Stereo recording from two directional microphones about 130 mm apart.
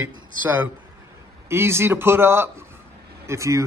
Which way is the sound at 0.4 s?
15° right (ahead or behind).